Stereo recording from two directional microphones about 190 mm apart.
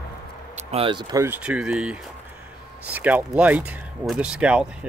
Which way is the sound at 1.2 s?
10° right (ahead or behind).